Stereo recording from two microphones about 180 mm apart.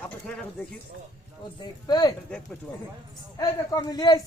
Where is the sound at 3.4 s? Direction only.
20° left (ahead or behind).